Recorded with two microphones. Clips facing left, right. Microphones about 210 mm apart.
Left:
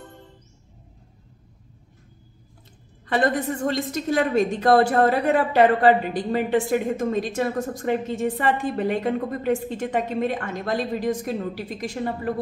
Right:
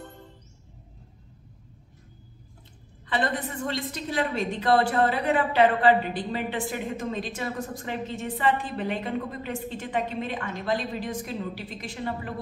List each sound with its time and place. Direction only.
3.1 s a woman's voice: 45° left (ahead or behind)